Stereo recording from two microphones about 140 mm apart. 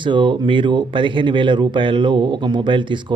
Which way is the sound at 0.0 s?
35° right (ahead or behind).